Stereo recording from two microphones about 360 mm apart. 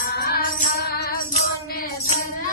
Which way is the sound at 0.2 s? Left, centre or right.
Left.